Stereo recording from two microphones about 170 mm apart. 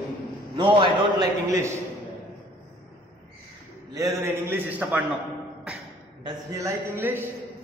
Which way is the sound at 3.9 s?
20° right (ahead or behind).